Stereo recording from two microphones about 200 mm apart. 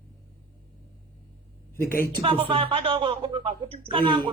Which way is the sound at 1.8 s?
45° left (ahead or behind).